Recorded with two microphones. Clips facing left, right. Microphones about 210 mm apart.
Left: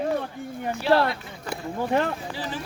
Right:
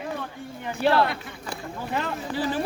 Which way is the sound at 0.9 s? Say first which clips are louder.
Left 1 dB; 55° right (ahead or behind).